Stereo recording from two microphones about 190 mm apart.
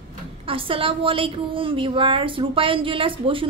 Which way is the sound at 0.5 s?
30° right (ahead or behind).